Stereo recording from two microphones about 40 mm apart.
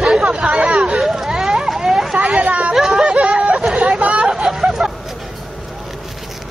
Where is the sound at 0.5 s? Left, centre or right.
Right.